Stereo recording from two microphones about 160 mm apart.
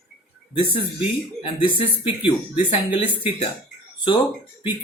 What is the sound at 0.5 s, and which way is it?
Speech, 35° left (ahead or behind).